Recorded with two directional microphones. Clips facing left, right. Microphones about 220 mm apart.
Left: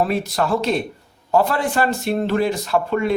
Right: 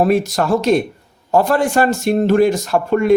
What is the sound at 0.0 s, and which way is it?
A man's voice, 45° right (ahead or behind).